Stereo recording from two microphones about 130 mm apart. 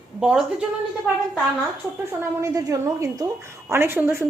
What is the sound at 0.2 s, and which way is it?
Speech, 5° right (ahead or behind).